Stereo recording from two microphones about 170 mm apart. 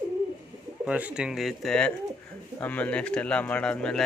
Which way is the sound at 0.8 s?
5° right (ahead or behind).